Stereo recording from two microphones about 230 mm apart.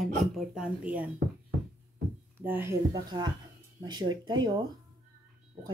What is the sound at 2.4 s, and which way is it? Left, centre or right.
Speech, centre.